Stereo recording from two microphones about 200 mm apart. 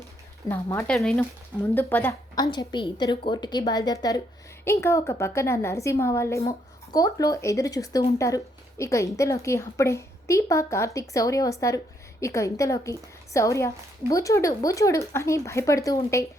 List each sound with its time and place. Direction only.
0.4 s a woman's voice: 15° left (ahead or behind)
0.9 s a woman's voice: centre (ahead or behind)